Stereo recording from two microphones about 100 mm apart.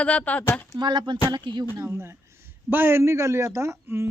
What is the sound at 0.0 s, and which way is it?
Speech, 15° left (ahead or behind).